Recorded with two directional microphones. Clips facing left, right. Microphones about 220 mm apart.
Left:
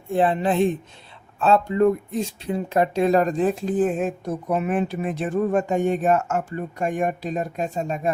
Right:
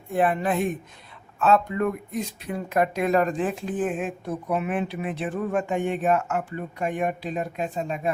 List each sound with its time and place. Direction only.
0.1 s speech: 25° left (ahead or behind)